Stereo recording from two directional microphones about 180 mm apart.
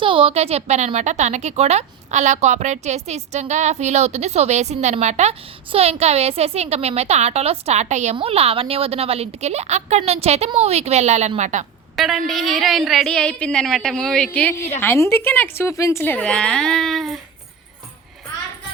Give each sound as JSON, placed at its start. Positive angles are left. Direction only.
{"t": 0.0, "sound": "a woman's voice", "side_deg": -30}
{"t": 11.9, "sound": "a woman's voice", "side_deg": 0}